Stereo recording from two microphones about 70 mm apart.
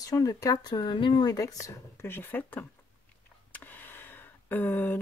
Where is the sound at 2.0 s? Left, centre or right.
Left.